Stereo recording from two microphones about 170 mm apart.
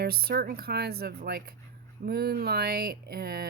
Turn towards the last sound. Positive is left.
turn(degrees=-65)  # may be behind; listen again after turning